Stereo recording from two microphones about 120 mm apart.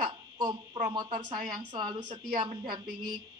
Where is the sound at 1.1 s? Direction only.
35° right (ahead or behind).